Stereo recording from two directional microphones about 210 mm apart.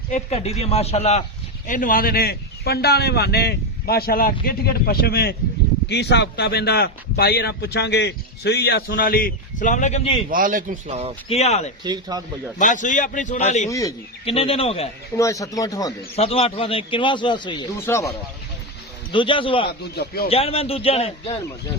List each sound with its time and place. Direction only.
0.1 s a man's voice: 30° left (ahead or behind)
10.2 s speech: 40° right (ahead or behind)
11.3 s a man's voice: 30° left (ahead or behind)
11.8 s speech: 20° right (ahead or behind)
12.5 s a man's voice: 35° left (ahead or behind)
13.7 s speech: 15° left (ahead or behind)
14.3 s a man's voice: 30° left (ahead or behind)
15.2 s speech: 15° left (ahead or behind)
16.1 s a man's voice: 30° left (ahead or behind); by 18.1 s 10° left (ahead or behind)
19.1 s a man's voice: 25° left (ahead or behind)